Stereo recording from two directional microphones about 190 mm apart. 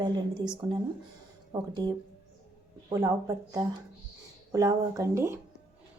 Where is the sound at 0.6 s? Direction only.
20° right (ahead or behind).